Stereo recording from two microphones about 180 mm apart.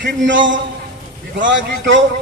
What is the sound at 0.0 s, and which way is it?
A man's voice, 90° right.